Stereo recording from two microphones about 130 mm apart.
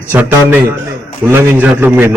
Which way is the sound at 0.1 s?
15° right (ahead or behind).